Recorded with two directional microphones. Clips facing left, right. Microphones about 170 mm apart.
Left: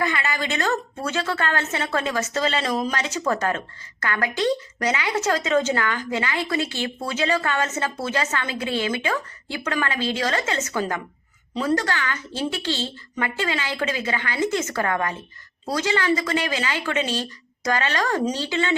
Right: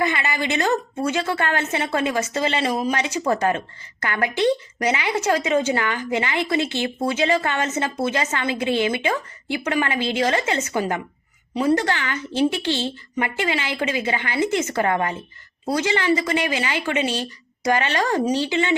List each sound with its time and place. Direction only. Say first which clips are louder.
0.0 s a woman's voice: right 2 dB; 20° right (ahead or behind)